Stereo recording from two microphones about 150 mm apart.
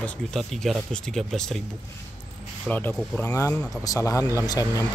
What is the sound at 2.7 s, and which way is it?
Speech, 10° left (ahead or behind).